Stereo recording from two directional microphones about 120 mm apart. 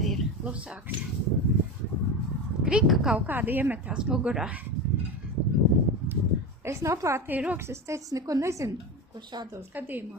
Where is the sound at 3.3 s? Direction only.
15° right (ahead or behind).